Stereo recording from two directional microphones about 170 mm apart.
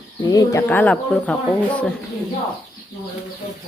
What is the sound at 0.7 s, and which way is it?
Speech, 10° left (ahead or behind).